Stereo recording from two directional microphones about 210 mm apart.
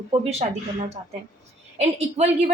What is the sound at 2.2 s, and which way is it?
Speech, 30° right (ahead or behind).